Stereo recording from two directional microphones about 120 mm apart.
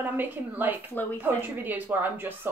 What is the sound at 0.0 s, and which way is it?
Speech, 15° right (ahead or behind).